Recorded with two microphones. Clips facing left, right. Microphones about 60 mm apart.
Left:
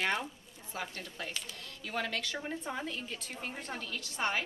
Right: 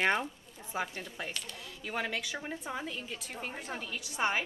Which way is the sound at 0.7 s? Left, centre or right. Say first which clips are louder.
Right 4 dB; centre.